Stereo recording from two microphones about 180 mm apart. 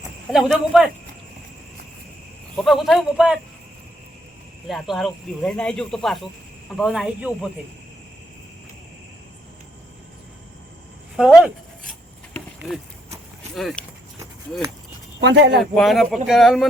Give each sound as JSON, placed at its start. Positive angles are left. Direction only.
{"t": 0.3, "sound": "speech", "side_deg": 0}
{"t": 2.6, "sound": "speech", "side_deg": 0}
{"t": 4.7, "sound": "speech", "side_deg": 0}
{"t": 11.2, "sound": "a sound", "side_deg": -5}
{"t": 13.6, "sound": "speech", "side_deg": 0}
{"t": 15.2, "sound": "speech", "side_deg": -75}
{"t": 15.7, "sound": "speech", "side_deg": 0}